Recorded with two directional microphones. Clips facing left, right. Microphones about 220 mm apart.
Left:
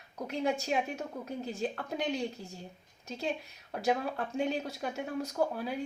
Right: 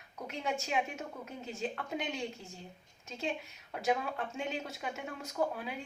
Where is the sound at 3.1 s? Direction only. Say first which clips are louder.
Left 2 dB; 35° left (ahead or behind).